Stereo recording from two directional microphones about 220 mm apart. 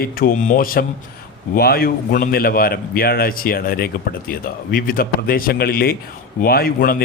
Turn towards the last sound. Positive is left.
turn(degrees=40)  # may be behind; listen again after turning